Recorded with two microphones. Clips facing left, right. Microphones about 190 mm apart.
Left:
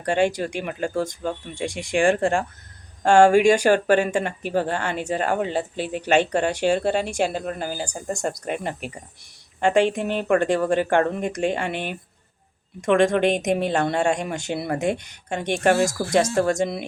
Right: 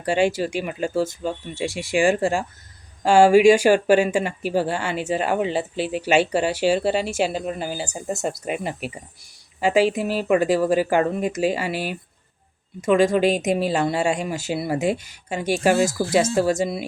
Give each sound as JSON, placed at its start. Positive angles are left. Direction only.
{"t": 0.0, "sound": "speech", "side_deg": -10}
{"t": 6.7, "sound": "speech", "side_deg": 45}
{"t": 7.0, "sound": "speech", "side_deg": -5}